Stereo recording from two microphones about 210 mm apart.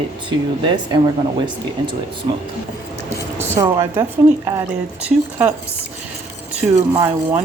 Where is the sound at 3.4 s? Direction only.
10° right (ahead or behind).